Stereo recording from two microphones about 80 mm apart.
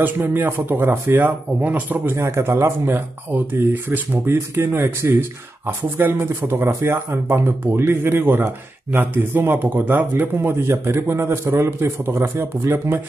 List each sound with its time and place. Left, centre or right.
0.2 s a man's voice: right